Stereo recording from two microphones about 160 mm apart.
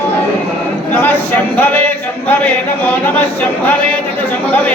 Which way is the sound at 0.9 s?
10° left (ahead or behind).